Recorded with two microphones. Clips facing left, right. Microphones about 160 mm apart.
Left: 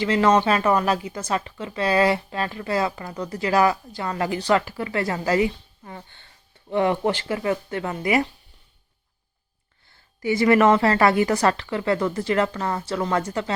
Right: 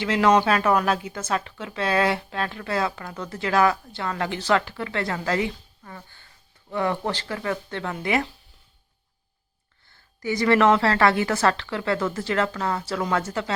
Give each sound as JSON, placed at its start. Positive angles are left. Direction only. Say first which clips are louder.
{"t": 0.0, "sound": "speech", "louder": "left 1 dB", "side_deg": -5}
{"t": 0.5, "sound": "speech", "louder": "left 1 dB", "side_deg": 5}
{"t": 5.8, "sound": "speech", "louder": "left 4 dB", "side_deg": 25}
{"t": 10.2, "sound": "speech", "louder": "left 3 dB", "side_deg": 25}
{"t": 10.4, "sound": "speech", "louder": "left 2 dB", "side_deg": 10}
{"t": 12.8, "sound": "speech", "louder": "left 1 dB", "side_deg": -5}